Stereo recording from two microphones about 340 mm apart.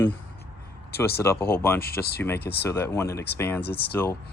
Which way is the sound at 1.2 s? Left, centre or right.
Centre.